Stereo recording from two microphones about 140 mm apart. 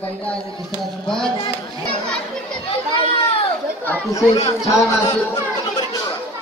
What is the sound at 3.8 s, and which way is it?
Speech, 15° left (ahead or behind).